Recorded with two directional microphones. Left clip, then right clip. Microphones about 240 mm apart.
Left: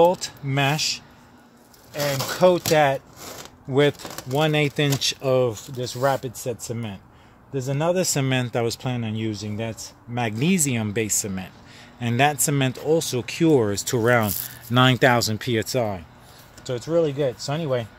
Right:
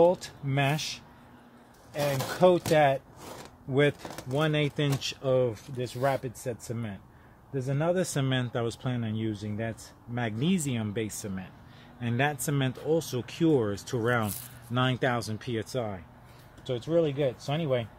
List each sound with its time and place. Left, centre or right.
0.0 s speech: centre
2.2 s speech: centre; by 14.3 s left
14.7 s speech: left
16.6 s speech: centre